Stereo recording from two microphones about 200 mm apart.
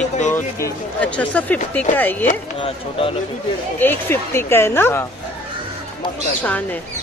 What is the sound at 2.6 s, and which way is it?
Speech, 30° left (ahead or behind).